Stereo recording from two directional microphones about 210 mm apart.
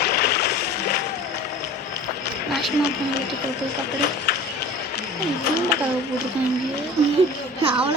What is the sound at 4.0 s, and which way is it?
Speech, 55° left (ahead or behind).